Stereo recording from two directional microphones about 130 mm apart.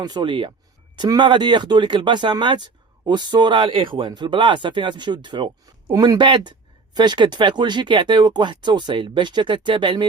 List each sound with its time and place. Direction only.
0.0 s speech: 35° right (ahead or behind)